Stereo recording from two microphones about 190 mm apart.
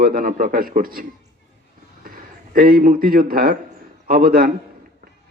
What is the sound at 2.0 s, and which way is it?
A man's voice, 50° right (ahead or behind).